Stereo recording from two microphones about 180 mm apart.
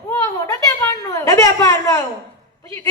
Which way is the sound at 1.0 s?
20° left (ahead or behind).